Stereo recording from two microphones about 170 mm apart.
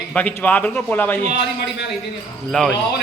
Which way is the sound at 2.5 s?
5° left (ahead or behind).